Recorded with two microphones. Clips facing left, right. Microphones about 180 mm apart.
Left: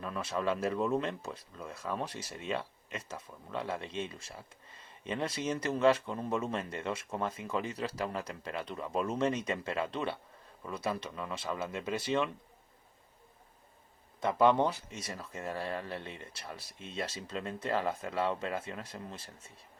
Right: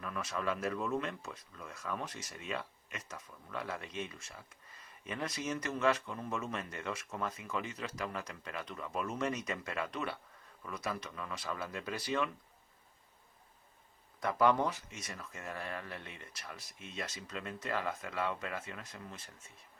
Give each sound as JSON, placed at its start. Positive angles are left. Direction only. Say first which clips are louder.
{"t": 0.0, "sound": "speech", "louder": "left 4 dB", "side_deg": 30}
{"t": 14.2, "sound": "speech", "louder": "left 3 dB", "side_deg": 25}